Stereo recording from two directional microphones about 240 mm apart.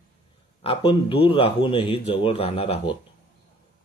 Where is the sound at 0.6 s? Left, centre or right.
Left.